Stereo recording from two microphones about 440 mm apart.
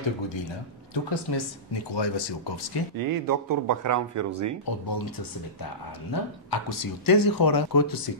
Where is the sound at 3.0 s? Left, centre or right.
Right.